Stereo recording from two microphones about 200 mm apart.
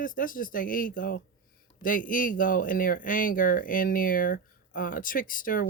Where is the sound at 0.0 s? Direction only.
45° left (ahead or behind).